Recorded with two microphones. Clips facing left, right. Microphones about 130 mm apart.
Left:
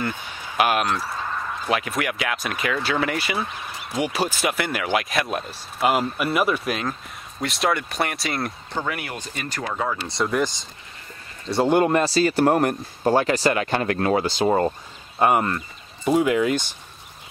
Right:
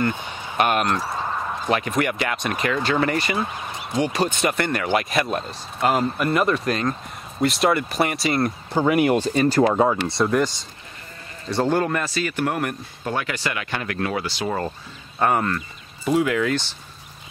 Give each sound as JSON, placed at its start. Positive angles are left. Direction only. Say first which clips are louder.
{"t": 0.6, "sound": "speech", "louder": "right 1 dB", "side_deg": 0}
{"t": 8.7, "sound": "speech", "louder": "right 11 dB", "side_deg": -20}
{"t": 9.2, "sound": "speech", "louder": "right 13 dB", "side_deg": -35}
{"t": 10.0, "sound": "speech", "louder": "right 3 dB", "side_deg": 0}
{"t": 11.5, "sound": "speech", "louder": "left 2 dB", "side_deg": 10}
{"t": 11.8, "sound": "speech", "louder": "left 5 dB", "side_deg": 25}
{"t": 15.1, "sound": "speech", "louder": "left 1 dB", "side_deg": 15}